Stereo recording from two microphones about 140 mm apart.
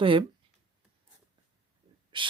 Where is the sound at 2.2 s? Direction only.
35° right (ahead or behind).